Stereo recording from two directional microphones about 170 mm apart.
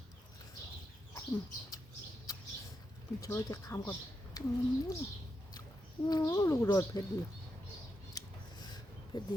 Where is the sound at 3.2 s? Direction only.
20° left (ahead or behind).